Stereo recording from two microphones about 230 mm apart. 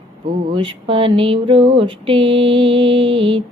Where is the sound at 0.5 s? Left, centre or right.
Right.